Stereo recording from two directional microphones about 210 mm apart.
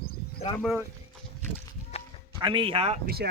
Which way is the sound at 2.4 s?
25° right (ahead or behind).